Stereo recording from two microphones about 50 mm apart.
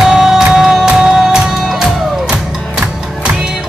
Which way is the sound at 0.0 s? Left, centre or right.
Centre.